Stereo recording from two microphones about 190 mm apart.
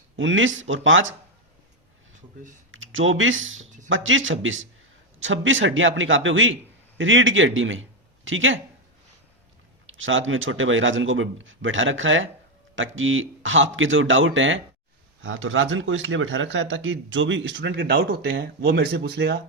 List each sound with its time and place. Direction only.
0.2 s speech: 90° right
2.7 s speech: 90° right
9.8 s speech: 90° right; by 18.2 s 55° right (ahead or behind)
18.3 s speech: 75° right (ahead or behind)
18.7 s speech: 55° right (ahead or behind)